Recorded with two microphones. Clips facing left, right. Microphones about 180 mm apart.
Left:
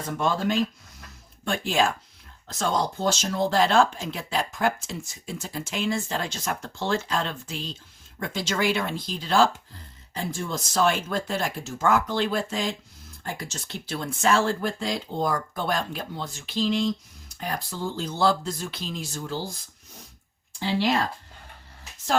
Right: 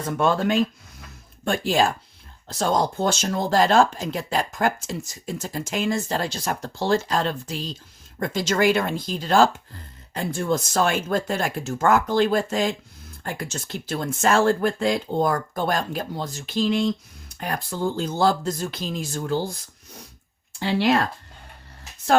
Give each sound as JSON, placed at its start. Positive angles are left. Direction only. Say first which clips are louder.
{"t": 0.2, "sound": "speech", "louder": "right 4 dB", "side_deg": -65}
{"t": 1.5, "sound": "speech", "louder": "right 3 dB", "side_deg": -40}
{"t": 10.2, "sound": "speech", "louder": "right 6 dB", "side_deg": -60}
{"t": 20.6, "sound": "speech", "louder": "right 4 dB", "side_deg": -65}